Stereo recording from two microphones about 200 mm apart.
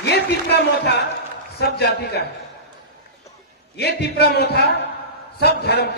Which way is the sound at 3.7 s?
55° left (ahead or behind).